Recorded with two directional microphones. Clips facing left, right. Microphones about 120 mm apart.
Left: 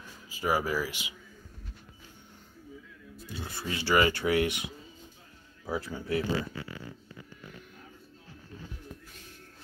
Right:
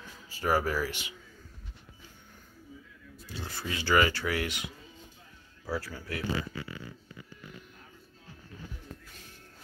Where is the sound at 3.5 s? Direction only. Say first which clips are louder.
Even; 25° left (ahead or behind).